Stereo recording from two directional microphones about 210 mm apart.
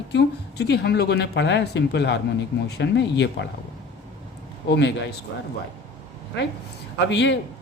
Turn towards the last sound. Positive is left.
turn(degrees=55)  # may be behind; listen again after turning